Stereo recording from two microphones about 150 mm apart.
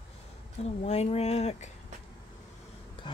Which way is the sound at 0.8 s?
45° left (ahead or behind).